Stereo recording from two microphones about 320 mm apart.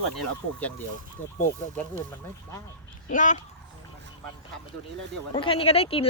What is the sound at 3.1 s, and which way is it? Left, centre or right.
Speech, left.